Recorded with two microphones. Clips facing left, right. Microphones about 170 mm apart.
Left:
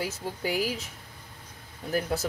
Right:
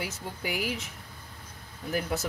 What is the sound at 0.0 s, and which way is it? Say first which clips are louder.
Speech: left 4 dB; 30° left (ahead or behind).